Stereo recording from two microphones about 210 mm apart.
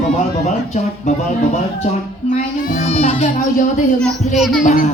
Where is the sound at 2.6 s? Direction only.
35° left (ahead or behind).